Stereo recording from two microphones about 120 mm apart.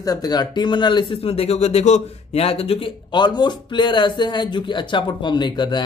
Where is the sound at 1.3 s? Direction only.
60° left (ahead or behind).